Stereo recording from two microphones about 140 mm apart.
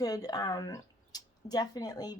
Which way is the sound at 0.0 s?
25° left (ahead or behind).